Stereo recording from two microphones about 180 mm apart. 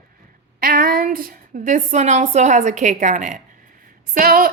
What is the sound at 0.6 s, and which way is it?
A woman's voice, 55° right (ahead or behind).